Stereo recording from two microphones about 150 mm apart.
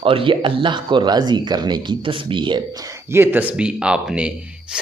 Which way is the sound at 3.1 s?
15° right (ahead or behind).